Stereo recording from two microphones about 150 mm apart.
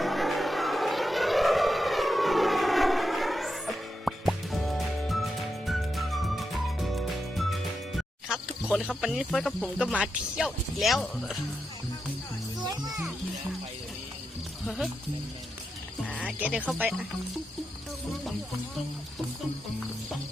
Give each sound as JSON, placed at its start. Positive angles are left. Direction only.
{"t": 0.0, "sound": "vehicle", "side_deg": 0}
{"t": 9.0, "sound": "speech", "side_deg": 0}
{"t": 12.6, "sound": "music", "side_deg": -25}
{"t": 16.2, "sound": "speech", "side_deg": -10}